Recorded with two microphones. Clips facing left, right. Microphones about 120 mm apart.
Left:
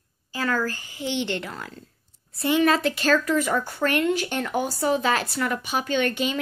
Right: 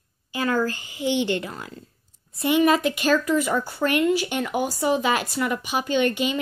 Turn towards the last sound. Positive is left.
turn(degrees=-10)  # may be behind; listen again after turning